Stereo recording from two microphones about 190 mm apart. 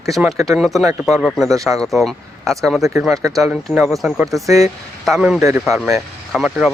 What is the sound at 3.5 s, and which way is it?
Speech, 5° right (ahead or behind).